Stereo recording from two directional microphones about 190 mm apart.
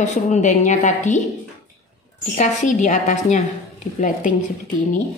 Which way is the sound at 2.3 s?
40° left (ahead or behind).